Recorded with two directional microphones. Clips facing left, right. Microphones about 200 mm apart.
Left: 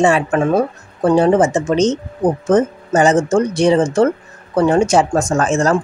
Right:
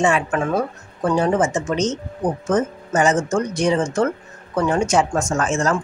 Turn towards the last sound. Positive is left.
turn(degrees=35)  # may be behind; listen again after turning